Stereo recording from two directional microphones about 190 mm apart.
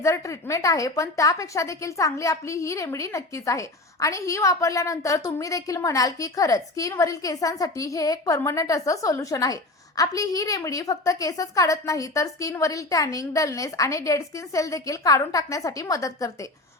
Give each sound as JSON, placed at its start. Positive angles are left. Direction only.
{"t": 0.0, "sound": "a woman's voice", "side_deg": 15}